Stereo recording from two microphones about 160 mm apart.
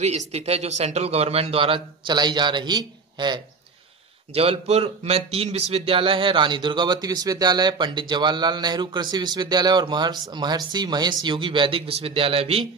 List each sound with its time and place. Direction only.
0.3 s a man's voice: 40° right (ahead or behind)
4.3 s a man's voice: 40° right (ahead or behind)